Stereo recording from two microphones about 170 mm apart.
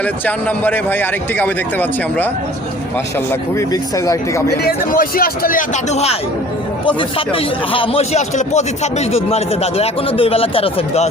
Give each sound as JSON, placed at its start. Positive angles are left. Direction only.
{"t": 0.0, "sound": "a man's voice", "side_deg": 10}
{"t": 3.7, "sound": "speech", "side_deg": 20}
{"t": 4.5, "sound": "a man's voice", "side_deg": 65}
{"t": 7.3, "sound": "speech", "side_deg": 30}